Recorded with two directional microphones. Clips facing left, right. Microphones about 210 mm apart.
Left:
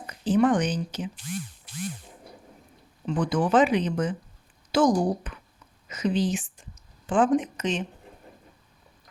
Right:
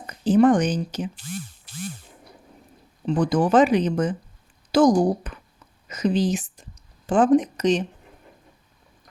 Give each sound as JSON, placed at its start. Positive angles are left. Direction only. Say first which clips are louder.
{"t": 0.1, "sound": "speech", "louder": "right 5 dB", "side_deg": -40}
{"t": 3.1, "sound": "speech", "louder": "right 4 dB", "side_deg": -40}